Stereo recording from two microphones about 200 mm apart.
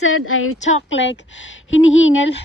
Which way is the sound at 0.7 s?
65° left (ahead or behind).